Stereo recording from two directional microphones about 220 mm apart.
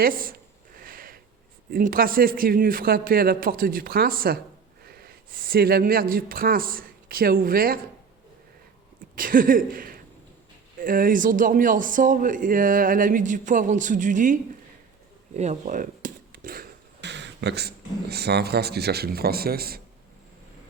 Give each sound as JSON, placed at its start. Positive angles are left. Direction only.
{"t": 0.0, "sound": "speech", "side_deg": -40}
{"t": 0.8, "sound": "a sound", "side_deg": -40}
{"t": 1.7, "sound": "speech", "side_deg": -40}
{"t": 9.1, "sound": "speech", "side_deg": -40}
{"t": 15.4, "sound": "speech", "side_deg": -30}